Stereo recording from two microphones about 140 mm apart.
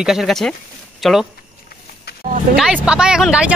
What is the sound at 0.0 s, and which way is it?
Speech, 5° right (ahead or behind).